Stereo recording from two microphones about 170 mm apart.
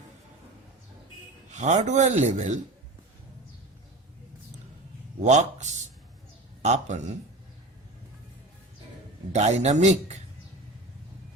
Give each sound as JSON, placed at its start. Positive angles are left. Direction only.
{"t": 1.5, "sound": "speech", "side_deg": -40}
{"t": 5.2, "sound": "speech", "side_deg": -45}
{"t": 9.3, "sound": "a man's voice", "side_deg": -40}